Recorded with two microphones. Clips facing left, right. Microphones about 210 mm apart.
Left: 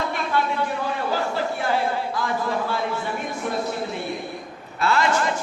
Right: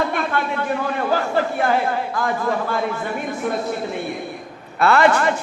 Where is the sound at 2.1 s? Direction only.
50° right (ahead or behind).